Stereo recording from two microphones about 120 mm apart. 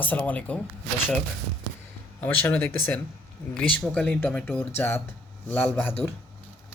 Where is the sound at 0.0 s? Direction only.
15° left (ahead or behind).